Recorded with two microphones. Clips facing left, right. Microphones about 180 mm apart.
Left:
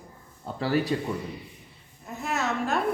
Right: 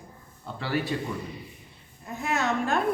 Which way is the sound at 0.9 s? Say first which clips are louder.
Left 2 dB; 35° left (ahead or behind).